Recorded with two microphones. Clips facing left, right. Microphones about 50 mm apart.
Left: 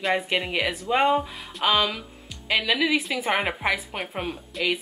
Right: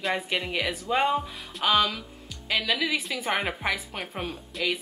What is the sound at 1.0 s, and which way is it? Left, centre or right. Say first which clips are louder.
A woman's voice: left 5 dB; centre.